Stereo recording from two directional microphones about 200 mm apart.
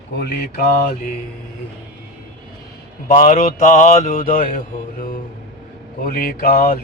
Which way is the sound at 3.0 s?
40° left (ahead or behind).